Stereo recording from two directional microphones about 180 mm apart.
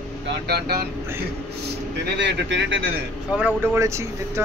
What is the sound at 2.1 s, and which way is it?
Speech, 75° right (ahead or behind).